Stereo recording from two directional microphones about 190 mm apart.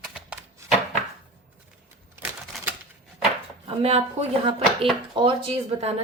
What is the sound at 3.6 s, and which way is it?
Speech, 35° right (ahead or behind).